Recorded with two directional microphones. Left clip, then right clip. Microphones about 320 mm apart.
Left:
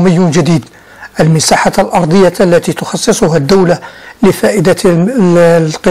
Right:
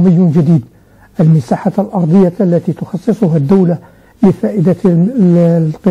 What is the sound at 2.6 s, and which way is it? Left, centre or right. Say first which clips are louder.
Speech: left 6 dB; centre.